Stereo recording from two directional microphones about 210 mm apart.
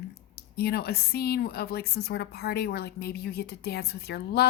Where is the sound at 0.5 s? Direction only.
50° left (ahead or behind).